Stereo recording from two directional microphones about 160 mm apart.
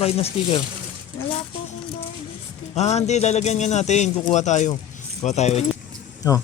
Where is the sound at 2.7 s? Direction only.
45° left (ahead or behind).